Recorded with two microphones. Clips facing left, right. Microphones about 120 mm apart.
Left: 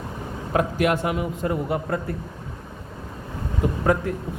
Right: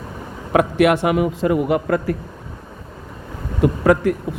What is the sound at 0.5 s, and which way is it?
A man's voice, 75° right (ahead or behind).